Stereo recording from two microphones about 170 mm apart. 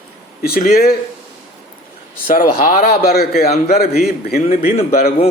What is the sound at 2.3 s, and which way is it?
A man's voice, 55° left (ahead or behind).